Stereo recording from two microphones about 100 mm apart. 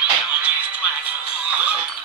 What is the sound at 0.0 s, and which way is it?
Music, 10° right (ahead or behind).